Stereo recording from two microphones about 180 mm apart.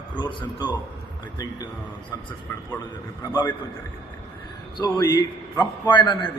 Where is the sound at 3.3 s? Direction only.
20° left (ahead or behind).